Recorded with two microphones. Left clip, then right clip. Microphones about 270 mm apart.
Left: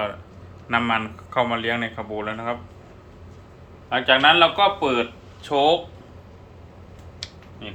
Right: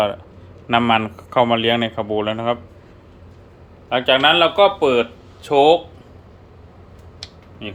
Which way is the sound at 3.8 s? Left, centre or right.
Right.